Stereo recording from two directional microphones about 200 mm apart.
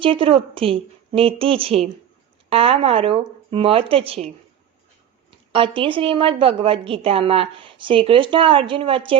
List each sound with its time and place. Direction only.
0.0 s a woman's voice: 25° right (ahead or behind)
5.5 s a woman's voice: 25° right (ahead or behind)